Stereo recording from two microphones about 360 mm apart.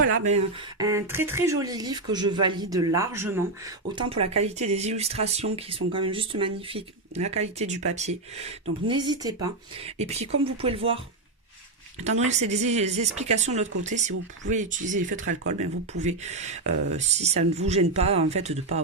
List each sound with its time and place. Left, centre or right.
0.0 s speech: centre
11.9 s speech: centre